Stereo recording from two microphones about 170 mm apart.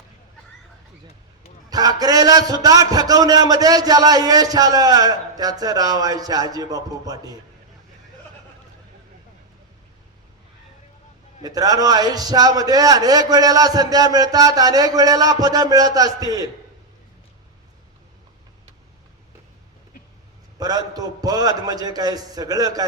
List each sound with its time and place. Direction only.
1.7 s a man's voice: 20° right (ahead or behind)
11.4 s a man's voice: 20° right (ahead or behind)
20.6 s a man's voice: 20° right (ahead or behind)